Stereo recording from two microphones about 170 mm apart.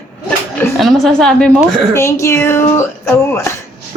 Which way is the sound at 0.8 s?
Centre (ahead or behind).